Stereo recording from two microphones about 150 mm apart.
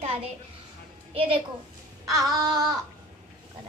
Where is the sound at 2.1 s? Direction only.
25° right (ahead or behind).